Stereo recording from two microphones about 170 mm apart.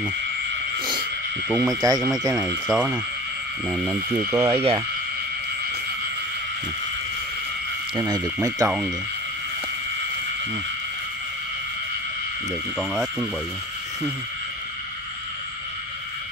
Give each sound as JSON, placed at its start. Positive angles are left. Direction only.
{"t": 1.5, "sound": "speech", "side_deg": -5}
{"t": 1.8, "sound": "speech", "side_deg": -20}
{"t": 2.3, "sound": "speech", "side_deg": -5}
{"t": 4.5, "sound": "speech", "side_deg": -35}
{"t": 7.9, "sound": "speech", "side_deg": -20}
{"t": 8.6, "sound": "speech", "side_deg": -5}
{"t": 12.7, "sound": "speech", "side_deg": 0}